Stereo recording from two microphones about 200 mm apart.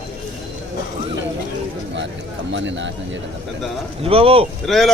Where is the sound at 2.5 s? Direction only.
65° right (ahead or behind).